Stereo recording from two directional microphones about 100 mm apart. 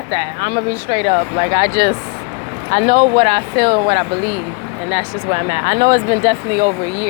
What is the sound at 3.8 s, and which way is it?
Speech, 90° right.